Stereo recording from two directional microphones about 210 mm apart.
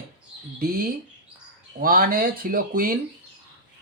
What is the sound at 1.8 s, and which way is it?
Speech, 45° right (ahead or behind).